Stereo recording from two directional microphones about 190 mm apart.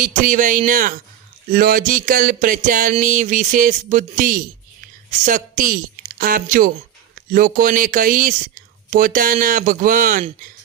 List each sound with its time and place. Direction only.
0.0 s a woman's voice: 40° right (ahead or behind)